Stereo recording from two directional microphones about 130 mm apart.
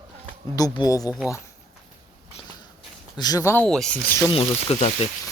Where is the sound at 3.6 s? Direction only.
5° left (ahead or behind).